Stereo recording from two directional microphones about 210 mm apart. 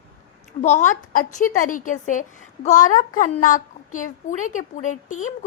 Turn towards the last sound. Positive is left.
turn(degrees=35)  # may be behind; listen again after turning